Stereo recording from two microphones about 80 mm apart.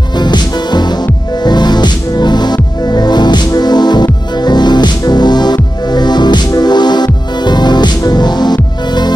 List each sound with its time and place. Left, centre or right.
0.2 s music: left